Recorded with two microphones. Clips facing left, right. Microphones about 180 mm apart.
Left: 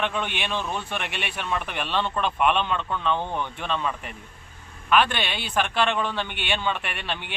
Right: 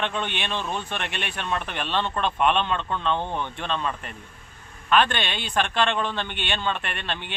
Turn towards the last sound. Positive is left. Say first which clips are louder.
# even
turn(degrees=10)  # may be behind; listen again after turning